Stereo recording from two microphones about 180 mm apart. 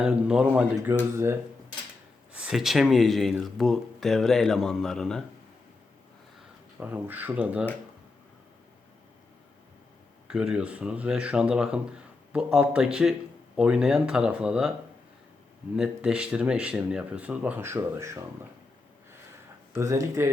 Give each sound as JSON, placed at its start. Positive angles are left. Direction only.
{"t": 0.0, "sound": "speech", "side_deg": -5}
{"t": 2.3, "sound": "speech", "side_deg": -5}
{"t": 6.7, "sound": "speech", "side_deg": -10}
{"t": 10.2, "sound": "speech", "side_deg": -5}
{"t": 15.7, "sound": "speech", "side_deg": -5}
{"t": 19.7, "sound": "speech", "side_deg": -15}